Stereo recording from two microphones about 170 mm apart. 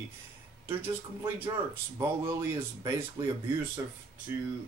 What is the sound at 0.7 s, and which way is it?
Speech, 10° right (ahead or behind).